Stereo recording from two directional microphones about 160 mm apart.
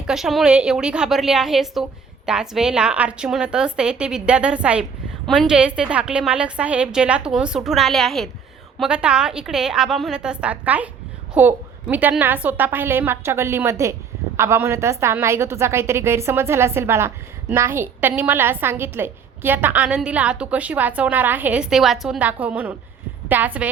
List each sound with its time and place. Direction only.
0.1 s a woman's voice: centre (ahead or behind)